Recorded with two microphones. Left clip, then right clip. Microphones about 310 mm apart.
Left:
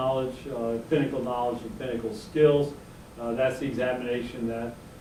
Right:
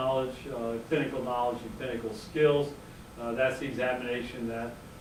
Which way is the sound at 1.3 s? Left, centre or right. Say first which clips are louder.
Left 1 dB; right.